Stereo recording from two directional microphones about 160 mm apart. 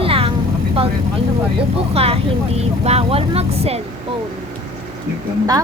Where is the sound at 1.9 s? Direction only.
40° right (ahead or behind).